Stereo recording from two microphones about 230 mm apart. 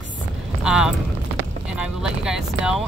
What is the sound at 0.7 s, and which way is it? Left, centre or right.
Speech, centre.